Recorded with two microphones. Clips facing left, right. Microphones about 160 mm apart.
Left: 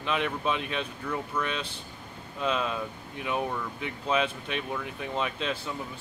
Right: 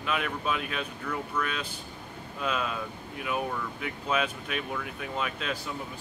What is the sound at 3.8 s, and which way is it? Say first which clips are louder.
Speech: left 2 dB; 30° left (ahead or behind).